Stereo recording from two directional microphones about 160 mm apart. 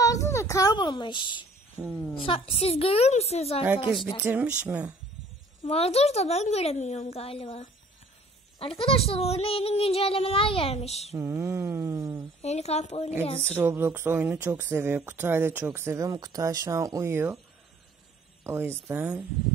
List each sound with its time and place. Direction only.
0.0 s a child's voice: 20° left (ahead or behind); by 3.6 s 40° left (ahead or behind)
4.2 s speech: 10° right (ahead or behind)
5.7 s speech: 40° left (ahead or behind)
11.1 s speech: 15° right (ahead or behind)
12.4 s speech: 40° left (ahead or behind)
13.5 s speech: 15° right (ahead or behind)
18.4 s speech: 15° right (ahead or behind)